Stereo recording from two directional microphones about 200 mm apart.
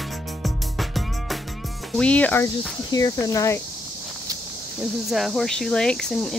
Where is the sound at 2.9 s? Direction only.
20° left (ahead or behind).